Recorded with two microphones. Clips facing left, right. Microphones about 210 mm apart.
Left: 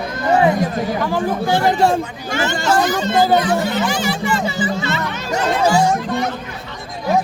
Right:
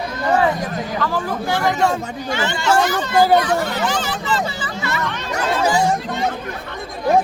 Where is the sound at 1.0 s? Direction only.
15° left (ahead or behind).